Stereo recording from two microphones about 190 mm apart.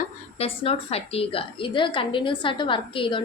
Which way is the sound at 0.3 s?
30° left (ahead or behind).